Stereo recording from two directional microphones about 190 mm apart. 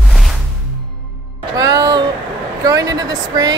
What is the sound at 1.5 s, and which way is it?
Music, 20° right (ahead or behind).